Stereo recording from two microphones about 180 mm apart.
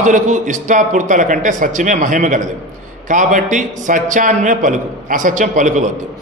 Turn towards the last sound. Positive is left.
turn(degrees=-45)  # may be behind; listen again after turning